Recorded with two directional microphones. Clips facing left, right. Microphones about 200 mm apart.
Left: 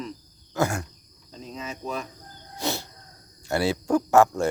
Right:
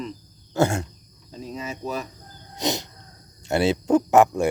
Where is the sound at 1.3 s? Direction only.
5° right (ahead or behind).